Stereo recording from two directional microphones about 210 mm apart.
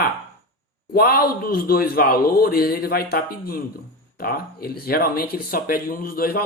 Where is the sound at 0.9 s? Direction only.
45° left (ahead or behind).